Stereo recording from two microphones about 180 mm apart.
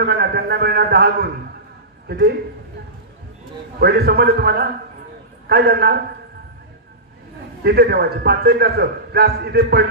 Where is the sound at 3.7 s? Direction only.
60° right (ahead or behind).